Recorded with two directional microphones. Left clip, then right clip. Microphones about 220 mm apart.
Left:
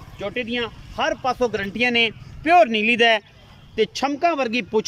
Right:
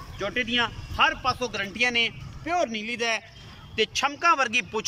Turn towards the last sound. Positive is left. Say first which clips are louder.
# left 2 dB
turn(degrees=20)  # may be behind; listen again after turning